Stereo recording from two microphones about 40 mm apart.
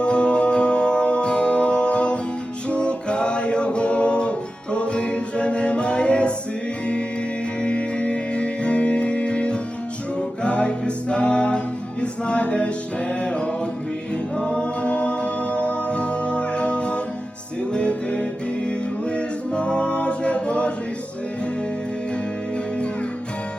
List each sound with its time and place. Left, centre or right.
0.0 s music: left
7.6 s music: left
19.1 s a capella: left